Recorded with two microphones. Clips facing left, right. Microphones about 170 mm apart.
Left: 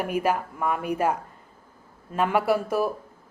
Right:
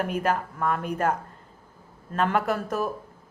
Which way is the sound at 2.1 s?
10° left (ahead or behind).